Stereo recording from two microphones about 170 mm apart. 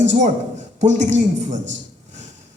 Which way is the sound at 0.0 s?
45° right (ahead or behind).